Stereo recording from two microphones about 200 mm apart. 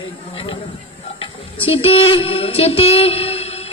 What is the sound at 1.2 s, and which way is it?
Speech, 30° left (ahead or behind).